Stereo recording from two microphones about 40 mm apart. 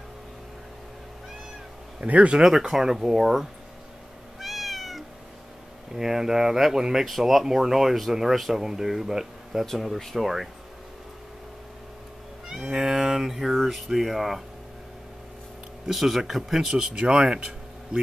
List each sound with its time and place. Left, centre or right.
2.0 s speech: right
2.3 s speech: centre
4.4 s cat: centre
5.9 s speech: centre
7.1 s speech: centre
9.7 s speech: centre
12.6 s speech: centre
15.9 s speech: centre
16.9 s speech: right